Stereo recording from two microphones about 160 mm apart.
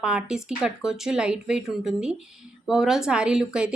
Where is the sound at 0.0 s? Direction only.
5° right (ahead or behind).